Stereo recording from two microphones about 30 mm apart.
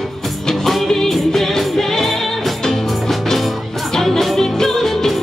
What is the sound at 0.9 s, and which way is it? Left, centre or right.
Music, centre.